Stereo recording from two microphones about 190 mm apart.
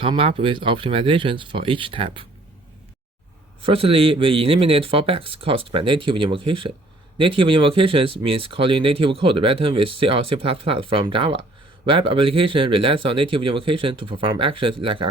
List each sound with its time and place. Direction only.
0.0 s speech: 30° right (ahead or behind)
3.6 s speech: 30° right (ahead or behind)